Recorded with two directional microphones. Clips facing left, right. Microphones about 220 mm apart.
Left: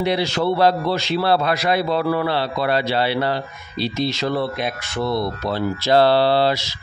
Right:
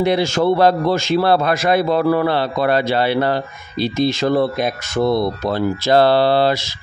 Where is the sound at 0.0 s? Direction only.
50° right (ahead or behind).